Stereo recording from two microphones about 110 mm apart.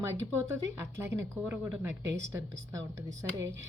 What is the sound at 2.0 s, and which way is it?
A woman's voice, 25° right (ahead or behind).